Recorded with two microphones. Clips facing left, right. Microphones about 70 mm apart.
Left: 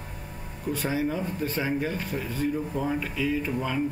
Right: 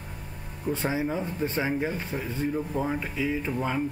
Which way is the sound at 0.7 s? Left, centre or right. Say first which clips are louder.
Left 1 dB; centre.